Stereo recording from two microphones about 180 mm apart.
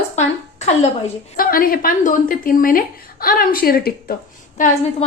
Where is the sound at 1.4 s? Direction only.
55° left (ahead or behind).